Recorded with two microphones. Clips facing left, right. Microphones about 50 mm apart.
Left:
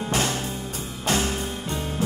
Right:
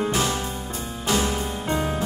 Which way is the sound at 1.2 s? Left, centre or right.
Right.